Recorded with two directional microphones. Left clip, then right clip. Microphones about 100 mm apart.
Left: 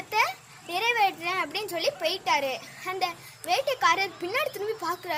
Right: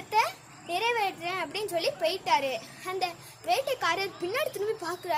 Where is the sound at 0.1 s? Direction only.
25° right (ahead or behind).